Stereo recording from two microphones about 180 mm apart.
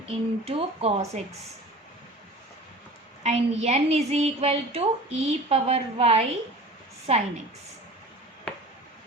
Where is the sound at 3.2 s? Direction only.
35° right (ahead or behind).